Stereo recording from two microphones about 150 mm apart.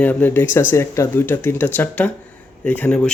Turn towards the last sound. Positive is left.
turn(degrees=10)  # may be behind; listen again after turning